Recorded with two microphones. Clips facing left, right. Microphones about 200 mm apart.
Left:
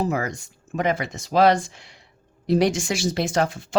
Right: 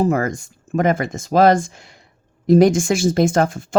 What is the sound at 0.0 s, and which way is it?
Speech, 50° right (ahead or behind).